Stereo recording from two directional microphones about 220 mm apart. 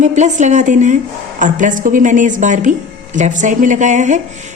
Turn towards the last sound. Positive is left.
turn(degrees=-35)  # may be behind; listen again after turning